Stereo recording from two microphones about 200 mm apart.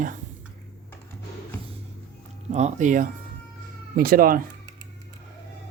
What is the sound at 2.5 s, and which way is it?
Speech, 35° right (ahead or behind).